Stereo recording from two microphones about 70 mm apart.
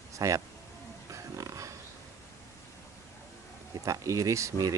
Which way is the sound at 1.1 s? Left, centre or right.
Right.